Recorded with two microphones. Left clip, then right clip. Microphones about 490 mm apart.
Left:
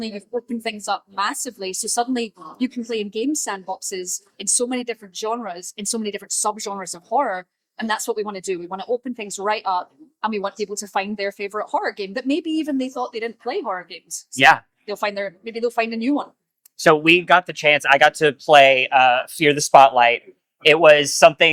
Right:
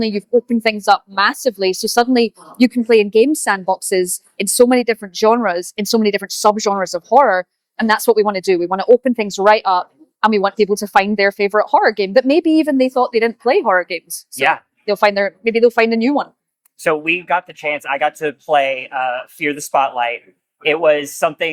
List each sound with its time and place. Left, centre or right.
0.4 s a woman's voice: right
14.3 s speech: left
14.8 s a woman's voice: right
16.7 s speech: left